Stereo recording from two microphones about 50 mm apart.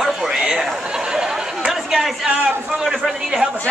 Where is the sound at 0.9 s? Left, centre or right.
Centre.